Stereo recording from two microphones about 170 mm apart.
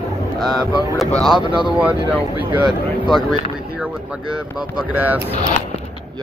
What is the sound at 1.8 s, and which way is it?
Speech, 10° right (ahead or behind).